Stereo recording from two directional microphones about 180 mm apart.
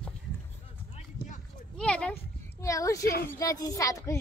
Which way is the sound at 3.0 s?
55° left (ahead or behind).